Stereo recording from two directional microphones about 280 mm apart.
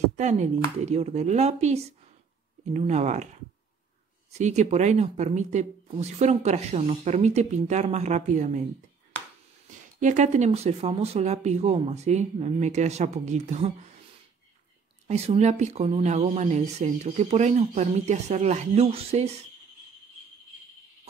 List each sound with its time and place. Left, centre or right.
0.1 s speech: right
4.3 s speech: right
9.9 s speech: right
15.0 s speech: right